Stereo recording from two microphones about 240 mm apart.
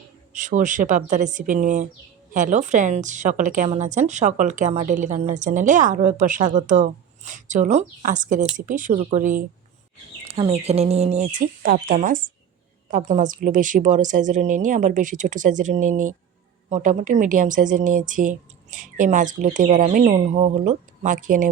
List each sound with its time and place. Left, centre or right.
0.3 s a woman's voice: right